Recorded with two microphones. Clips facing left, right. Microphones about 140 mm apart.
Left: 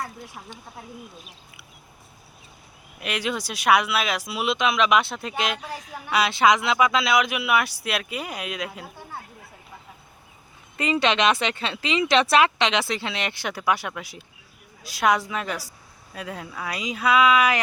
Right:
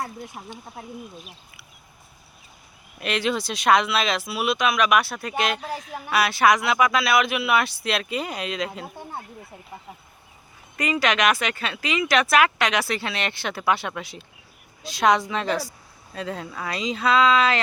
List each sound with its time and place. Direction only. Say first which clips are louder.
0.4 s speech: right 2 dB; 20° right (ahead or behind)
3.0 s speech: right 3 dB; 10° left (ahead or behind)
10.8 s speech: left 1 dB; 25° left (ahead or behind)